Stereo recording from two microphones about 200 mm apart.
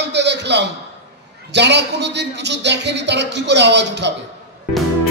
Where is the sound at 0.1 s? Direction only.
60° right (ahead or behind).